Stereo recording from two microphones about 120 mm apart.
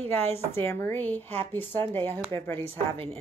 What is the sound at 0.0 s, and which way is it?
A woman's voice, 15° left (ahead or behind).